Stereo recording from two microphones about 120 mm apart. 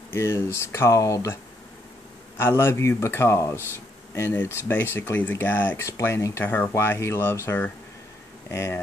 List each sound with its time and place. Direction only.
0.1 s speech: 20° left (ahead or behind)